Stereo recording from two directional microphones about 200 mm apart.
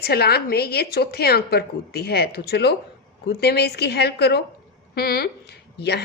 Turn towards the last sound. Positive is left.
turn(degrees=55)  # may be behind; listen again after turning